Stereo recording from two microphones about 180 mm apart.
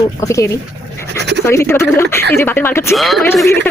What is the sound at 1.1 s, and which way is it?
Scratch, 70° right (ahead or behind).